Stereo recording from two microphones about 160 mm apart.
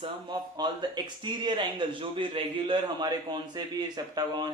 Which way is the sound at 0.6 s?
30° right (ahead or behind).